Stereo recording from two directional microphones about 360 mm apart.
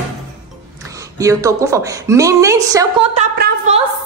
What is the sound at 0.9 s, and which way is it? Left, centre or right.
A woman's voice, centre.